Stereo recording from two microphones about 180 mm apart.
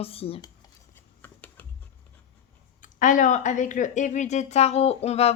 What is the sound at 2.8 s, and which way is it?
Speech, 45° left (ahead or behind).